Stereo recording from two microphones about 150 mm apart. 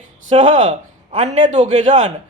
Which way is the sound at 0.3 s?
55° right (ahead or behind).